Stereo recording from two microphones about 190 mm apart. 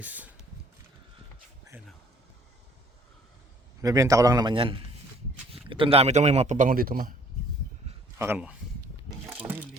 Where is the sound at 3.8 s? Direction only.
15° right (ahead or behind); by 7.1 s 50° right (ahead or behind).